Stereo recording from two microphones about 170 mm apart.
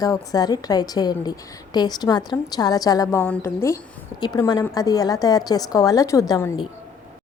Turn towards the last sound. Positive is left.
turn(degrees=20)  # may be behind; listen again after turning